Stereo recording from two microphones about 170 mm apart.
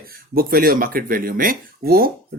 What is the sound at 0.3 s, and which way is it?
Speech, 60° right (ahead or behind).